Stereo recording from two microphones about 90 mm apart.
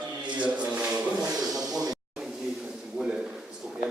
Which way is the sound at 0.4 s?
15° right (ahead or behind).